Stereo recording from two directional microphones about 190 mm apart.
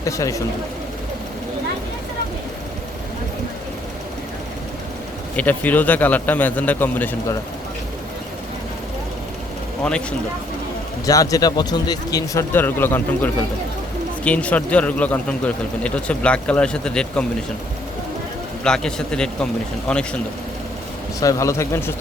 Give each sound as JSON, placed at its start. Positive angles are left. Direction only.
{"t": 0.0, "sound": "a man's voice", "side_deg": 15}
{"t": 5.4, "sound": "a man's voice", "side_deg": 10}
{"t": 9.8, "sound": "a man's voice", "side_deg": 5}
{"t": 11.0, "sound": "a man's voice", "side_deg": 20}
{"t": 18.6, "sound": "a man's voice", "side_deg": 5}
{"t": 21.2, "sound": "a man's voice", "side_deg": 15}